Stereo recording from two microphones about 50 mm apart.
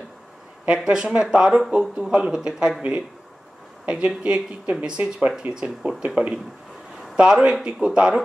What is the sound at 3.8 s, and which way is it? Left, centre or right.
Speech, right.